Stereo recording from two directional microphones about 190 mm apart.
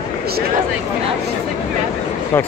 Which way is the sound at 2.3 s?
10° left (ahead or behind).